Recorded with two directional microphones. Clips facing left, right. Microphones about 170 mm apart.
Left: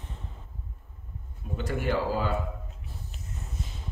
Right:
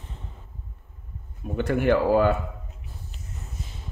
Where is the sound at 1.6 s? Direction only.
60° right (ahead or behind).